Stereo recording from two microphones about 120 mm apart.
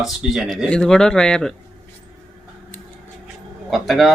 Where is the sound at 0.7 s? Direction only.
5° left (ahead or behind).